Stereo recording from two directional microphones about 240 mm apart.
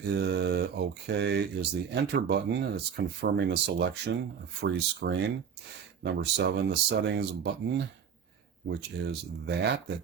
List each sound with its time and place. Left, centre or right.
0.1 s speech: right